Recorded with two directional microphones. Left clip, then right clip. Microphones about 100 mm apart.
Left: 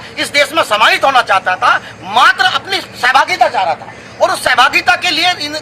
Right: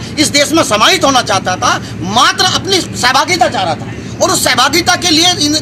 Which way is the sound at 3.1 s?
10° left (ahead or behind).